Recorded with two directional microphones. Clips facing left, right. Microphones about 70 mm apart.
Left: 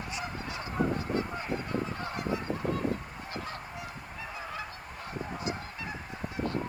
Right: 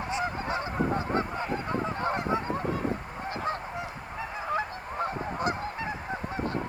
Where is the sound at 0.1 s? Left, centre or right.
Right.